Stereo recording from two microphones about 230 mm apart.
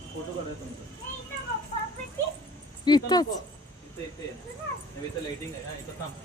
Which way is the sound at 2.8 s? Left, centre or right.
Centre.